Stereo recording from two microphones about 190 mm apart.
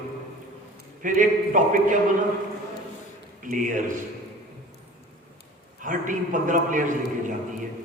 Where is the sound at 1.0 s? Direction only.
40° right (ahead or behind).